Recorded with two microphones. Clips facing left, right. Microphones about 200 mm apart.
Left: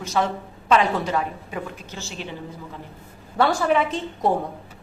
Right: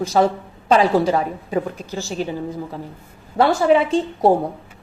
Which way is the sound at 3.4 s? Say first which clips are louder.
Right 5 dB; 30° right (ahead or behind).